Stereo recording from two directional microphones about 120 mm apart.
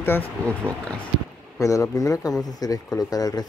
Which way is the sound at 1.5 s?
25° left (ahead or behind).